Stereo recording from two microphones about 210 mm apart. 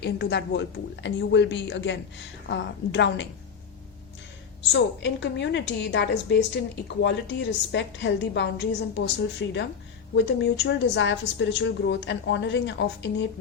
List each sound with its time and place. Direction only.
0.0 s a woman's voice: 55° left (ahead or behind)
4.7 s a woman's voice: 55° left (ahead or behind)